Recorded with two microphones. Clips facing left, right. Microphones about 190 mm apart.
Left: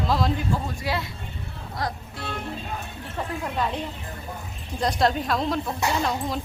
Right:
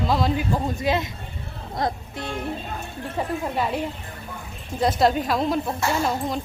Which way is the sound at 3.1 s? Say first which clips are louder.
Right 3 dB; 10° right (ahead or behind).